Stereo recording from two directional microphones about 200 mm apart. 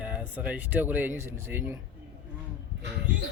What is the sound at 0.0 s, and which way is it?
Speech, 5° right (ahead or behind).